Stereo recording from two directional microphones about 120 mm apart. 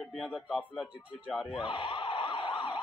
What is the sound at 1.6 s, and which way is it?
Emergency vehicle, 45° left (ahead or behind).